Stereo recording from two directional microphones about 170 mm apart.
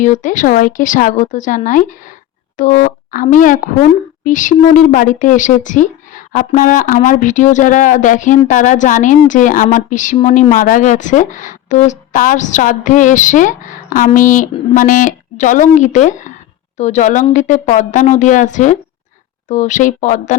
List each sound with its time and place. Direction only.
0.0 s speech: 50° left (ahead or behind)